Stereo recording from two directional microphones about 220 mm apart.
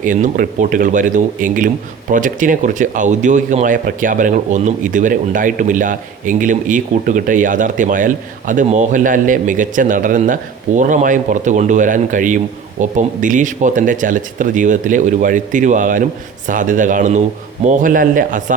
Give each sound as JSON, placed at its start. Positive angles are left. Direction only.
{"t": 0.0, "sound": "speech", "side_deg": -35}